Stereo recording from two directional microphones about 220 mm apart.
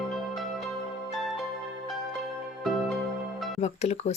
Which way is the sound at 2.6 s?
Centre (ahead or behind).